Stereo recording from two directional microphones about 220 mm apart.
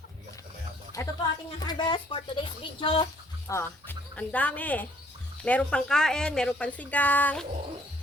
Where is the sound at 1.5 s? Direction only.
20° left (ahead or behind).